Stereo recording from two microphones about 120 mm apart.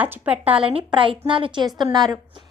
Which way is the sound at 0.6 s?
50° right (ahead or behind).